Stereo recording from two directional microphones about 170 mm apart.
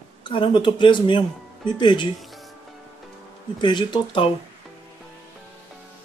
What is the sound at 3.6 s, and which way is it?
Speech, 25° left (ahead or behind).